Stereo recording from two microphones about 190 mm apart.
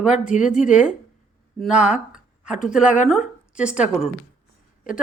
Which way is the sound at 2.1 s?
5° right (ahead or behind).